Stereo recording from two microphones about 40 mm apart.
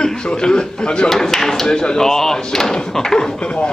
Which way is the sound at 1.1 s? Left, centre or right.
Centre.